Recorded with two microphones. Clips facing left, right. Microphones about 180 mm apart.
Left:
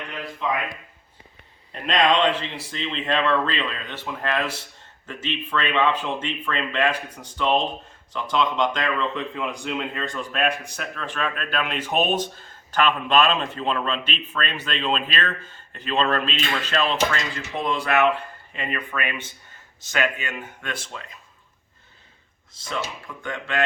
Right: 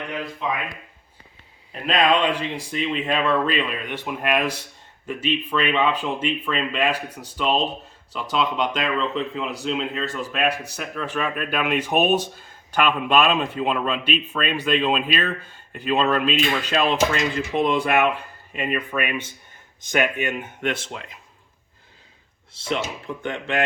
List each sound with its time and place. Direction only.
1.7 s speech: 5° right (ahead or behind); by 20.9 s 25° right (ahead or behind)
22.5 s speech: 30° right (ahead or behind)